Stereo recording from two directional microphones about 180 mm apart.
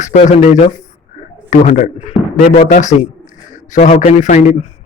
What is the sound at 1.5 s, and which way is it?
Speech, 40° left (ahead or behind).